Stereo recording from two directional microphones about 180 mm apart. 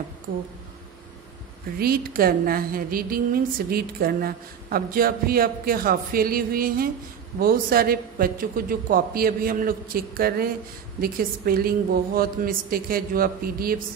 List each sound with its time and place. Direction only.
1.8 s a woman's voice: 55° right (ahead or behind)